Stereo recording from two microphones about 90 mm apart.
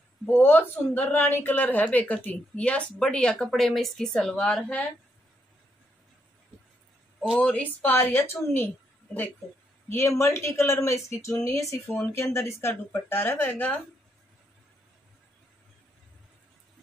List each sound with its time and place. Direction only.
0.3 s a woman's voice: 25° left (ahead or behind)
7.3 s a woman's voice: 10° left (ahead or behind)
7.9 s speech: 25° left (ahead or behind)
9.8 s speech: 30° left (ahead or behind)